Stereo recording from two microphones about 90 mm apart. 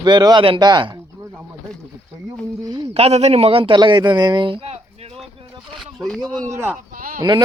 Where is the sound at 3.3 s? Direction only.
90° right.